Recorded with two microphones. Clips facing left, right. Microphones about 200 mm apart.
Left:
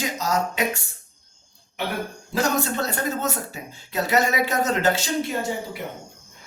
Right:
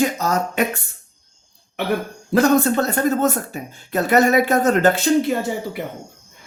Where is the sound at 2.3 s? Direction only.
55° right (ahead or behind).